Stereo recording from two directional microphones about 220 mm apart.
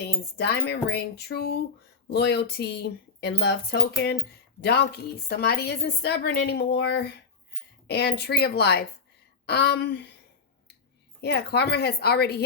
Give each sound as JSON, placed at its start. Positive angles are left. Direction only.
{"t": 0.0, "sound": "speech", "side_deg": 50}
{"t": 11.2, "sound": "speech", "side_deg": 50}